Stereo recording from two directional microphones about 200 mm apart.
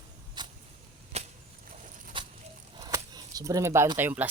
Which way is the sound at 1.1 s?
30° right (ahead or behind).